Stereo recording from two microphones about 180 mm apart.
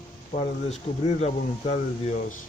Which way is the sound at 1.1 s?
35° left (ahead or behind).